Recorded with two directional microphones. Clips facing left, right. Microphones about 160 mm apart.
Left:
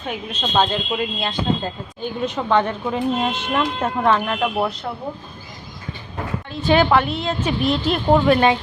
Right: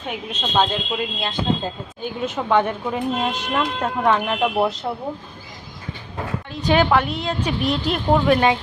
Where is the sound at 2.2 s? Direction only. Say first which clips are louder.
Even; 10° right (ahead or behind).